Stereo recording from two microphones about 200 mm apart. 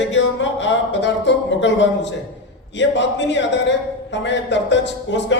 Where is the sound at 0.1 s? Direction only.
70° left (ahead or behind).